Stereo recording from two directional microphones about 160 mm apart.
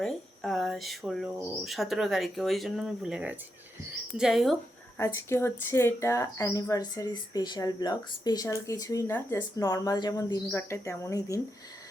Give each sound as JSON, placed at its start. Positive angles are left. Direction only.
{"t": 0.0, "sound": "speech", "side_deg": 5}
{"t": 4.9, "sound": "speech", "side_deg": 15}